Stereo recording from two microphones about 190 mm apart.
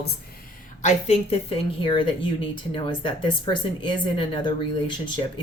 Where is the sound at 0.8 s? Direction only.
35° left (ahead or behind).